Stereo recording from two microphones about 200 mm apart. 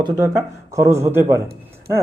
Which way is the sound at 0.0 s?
15° right (ahead or behind).